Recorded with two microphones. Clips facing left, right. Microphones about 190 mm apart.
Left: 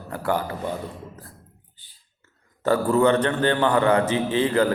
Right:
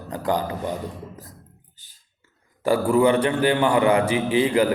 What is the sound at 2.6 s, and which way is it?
A man's voice, 10° right (ahead or behind).